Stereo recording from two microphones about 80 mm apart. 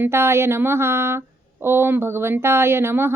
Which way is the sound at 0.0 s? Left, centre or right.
Right.